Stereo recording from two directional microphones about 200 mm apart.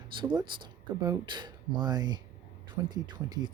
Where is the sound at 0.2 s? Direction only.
25° right (ahead or behind).